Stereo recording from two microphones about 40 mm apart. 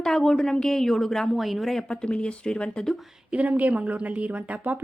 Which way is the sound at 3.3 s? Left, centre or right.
Right.